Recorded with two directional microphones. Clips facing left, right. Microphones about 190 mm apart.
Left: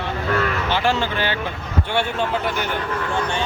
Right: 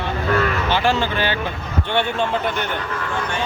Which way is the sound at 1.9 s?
10° left (ahead or behind).